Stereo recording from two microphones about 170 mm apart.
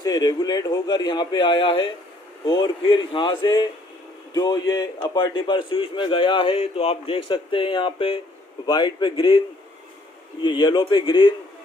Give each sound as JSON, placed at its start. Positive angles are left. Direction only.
{"t": 0.0, "sound": "a man's voice", "side_deg": 25}
{"t": 10.4, "sound": "a man's voice", "side_deg": 25}